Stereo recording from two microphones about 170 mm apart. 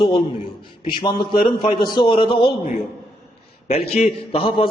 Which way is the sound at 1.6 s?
25° left (ahead or behind).